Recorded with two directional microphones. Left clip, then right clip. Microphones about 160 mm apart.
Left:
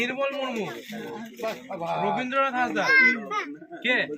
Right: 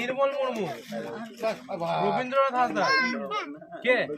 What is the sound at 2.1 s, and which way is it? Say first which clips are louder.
Speech: right 2 dB; 30° right (ahead or behind).